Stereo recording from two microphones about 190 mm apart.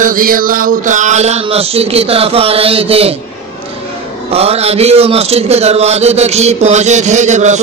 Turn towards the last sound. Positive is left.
turn(degrees=-40)  # may be behind; listen again after turning